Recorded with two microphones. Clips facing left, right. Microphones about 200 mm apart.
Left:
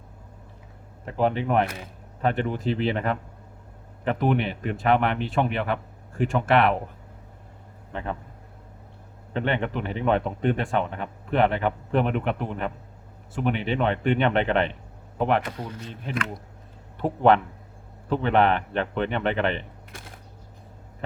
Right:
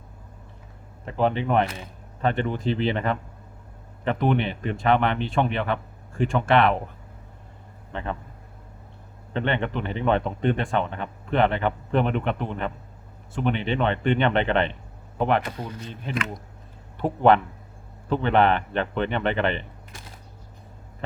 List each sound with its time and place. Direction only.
1.0 s speech: 5° left (ahead or behind)
7.9 s speech: 5° left (ahead or behind)
9.3 s speech: 5° left (ahead or behind)
15.4 s speech: 25° right (ahead or behind)
17.0 s speech: centre (ahead or behind)
19.9 s a sound: 55° left (ahead or behind)